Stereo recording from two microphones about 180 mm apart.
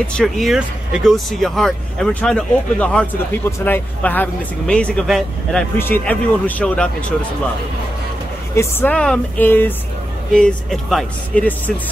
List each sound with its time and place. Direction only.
0.0 s speech: centre (ahead or behind)
8.5 s speech: 10° left (ahead or behind)